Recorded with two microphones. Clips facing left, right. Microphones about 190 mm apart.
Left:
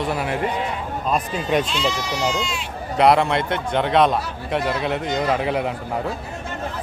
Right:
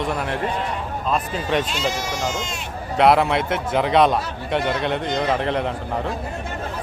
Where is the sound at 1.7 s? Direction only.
50° right (ahead or behind).